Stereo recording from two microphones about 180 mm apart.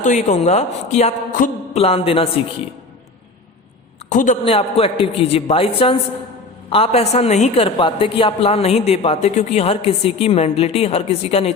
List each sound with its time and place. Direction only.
0.0 s a woman's voice: 40° left (ahead or behind)
4.1 s a man's voice: 45° left (ahead or behind)
4.4 s a woman's voice: 30° left (ahead or behind)